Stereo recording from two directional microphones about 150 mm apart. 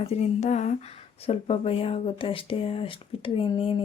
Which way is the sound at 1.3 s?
40° left (ahead or behind).